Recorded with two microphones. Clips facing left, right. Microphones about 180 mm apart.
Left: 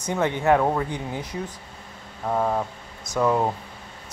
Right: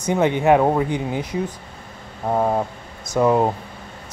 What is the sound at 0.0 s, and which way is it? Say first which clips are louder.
Speech: right 5 dB; 20° right (ahead or behind).